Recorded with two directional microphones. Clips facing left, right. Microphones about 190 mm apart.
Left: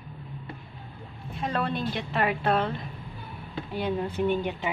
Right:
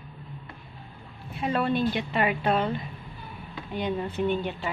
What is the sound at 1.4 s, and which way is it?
A woman's voice, 5° right (ahead or behind).